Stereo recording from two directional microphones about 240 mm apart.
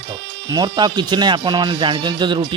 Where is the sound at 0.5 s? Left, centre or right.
Centre.